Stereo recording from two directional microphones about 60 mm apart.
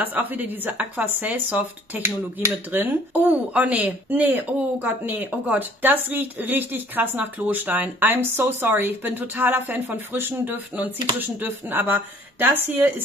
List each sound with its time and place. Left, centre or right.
0.0 s speech: right